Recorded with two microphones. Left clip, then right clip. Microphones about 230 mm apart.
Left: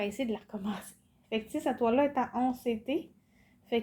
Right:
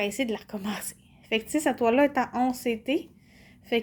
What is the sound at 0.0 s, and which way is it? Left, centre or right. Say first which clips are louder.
Speech: right 5 dB; right.